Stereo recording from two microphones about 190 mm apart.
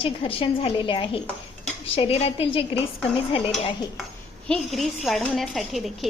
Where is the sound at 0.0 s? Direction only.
30° left (ahead or behind).